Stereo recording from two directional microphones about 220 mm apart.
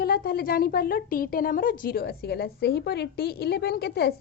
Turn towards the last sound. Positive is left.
turn(degrees=45)  # may be behind; listen again after turning